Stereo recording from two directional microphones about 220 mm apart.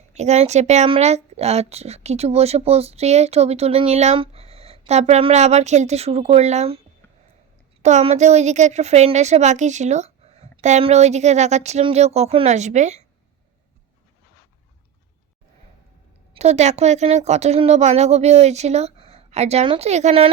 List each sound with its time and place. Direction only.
0.1 s a woman's voice: 30° right (ahead or behind)
16.3 s speech: 30° right (ahead or behind)